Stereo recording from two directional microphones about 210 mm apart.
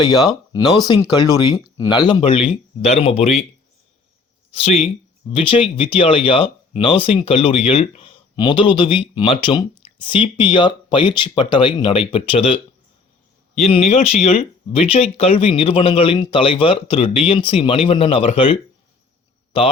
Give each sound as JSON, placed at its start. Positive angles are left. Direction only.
{"t": 0.0, "sound": "speech", "side_deg": 20}
{"t": 4.5, "sound": "speech", "side_deg": 30}
{"t": 13.6, "sound": "speech", "side_deg": 30}